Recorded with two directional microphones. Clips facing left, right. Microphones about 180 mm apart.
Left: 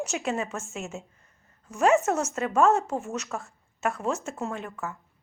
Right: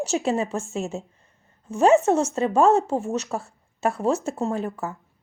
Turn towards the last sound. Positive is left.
turn(degrees=-35)  # may be behind; listen again after turning